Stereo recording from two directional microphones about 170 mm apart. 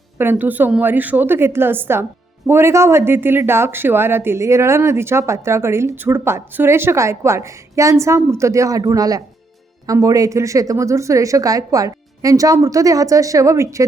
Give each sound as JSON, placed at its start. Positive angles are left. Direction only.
{"t": 0.2, "sound": "a woman's voice", "side_deg": -10}